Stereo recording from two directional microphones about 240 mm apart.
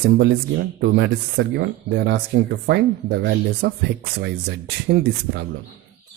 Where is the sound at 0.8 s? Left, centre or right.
Right.